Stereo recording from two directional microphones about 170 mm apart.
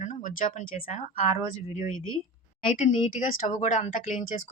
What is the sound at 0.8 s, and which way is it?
Speech, 40° left (ahead or behind).